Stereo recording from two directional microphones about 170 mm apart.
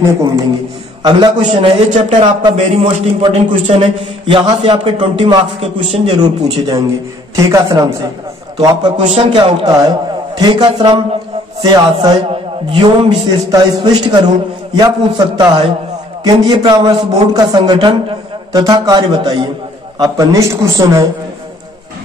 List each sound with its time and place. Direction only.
1.4 s a man's voice: 35° right (ahead or behind)
3.3 s a man's voice: 30° right (ahead or behind)
7.3 s a man's voice: 20° right (ahead or behind)
9.0 s a man's voice: 40° right (ahead or behind)
9.3 s a man's voice: 30° right (ahead or behind)